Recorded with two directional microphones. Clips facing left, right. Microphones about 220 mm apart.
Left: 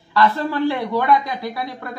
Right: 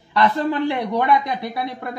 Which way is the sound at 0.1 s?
20° right (ahead or behind).